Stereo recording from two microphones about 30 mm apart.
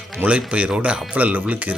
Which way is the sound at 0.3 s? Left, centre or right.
Right.